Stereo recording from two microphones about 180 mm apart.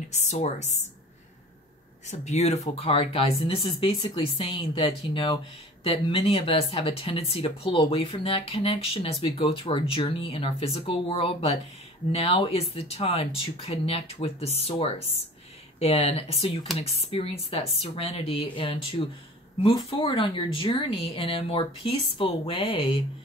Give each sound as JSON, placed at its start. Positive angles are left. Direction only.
{"t": 0.1, "sound": "speech", "side_deg": 40}
{"t": 2.0, "sound": "speech", "side_deg": 40}